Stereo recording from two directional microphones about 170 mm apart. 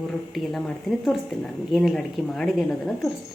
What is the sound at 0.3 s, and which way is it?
A woman's voice, centre (ahead or behind).